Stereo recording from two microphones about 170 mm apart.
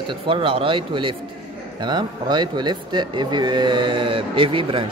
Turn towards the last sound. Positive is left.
turn(degrees=-30)  # may be behind; listen again after turning